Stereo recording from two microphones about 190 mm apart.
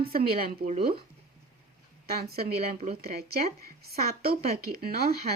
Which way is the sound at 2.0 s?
55° right (ahead or behind).